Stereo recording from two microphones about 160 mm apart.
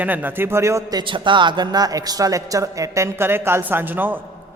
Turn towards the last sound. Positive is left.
turn(degrees=-10)  # may be behind; listen again after turning